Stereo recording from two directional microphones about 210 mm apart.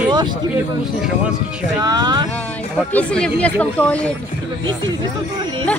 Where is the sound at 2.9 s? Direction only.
5° left (ahead or behind).